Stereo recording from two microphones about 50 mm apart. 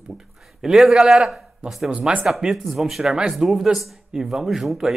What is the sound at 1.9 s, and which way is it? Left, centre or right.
Speech, centre.